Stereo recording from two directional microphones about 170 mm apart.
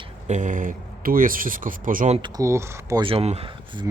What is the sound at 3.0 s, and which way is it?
Speech, 35° right (ahead or behind).